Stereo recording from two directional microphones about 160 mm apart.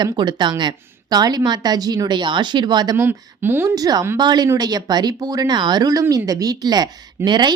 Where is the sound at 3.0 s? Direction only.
15° right (ahead or behind).